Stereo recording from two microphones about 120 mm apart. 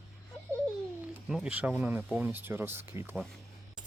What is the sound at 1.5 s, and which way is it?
Speech, 10° right (ahead or behind).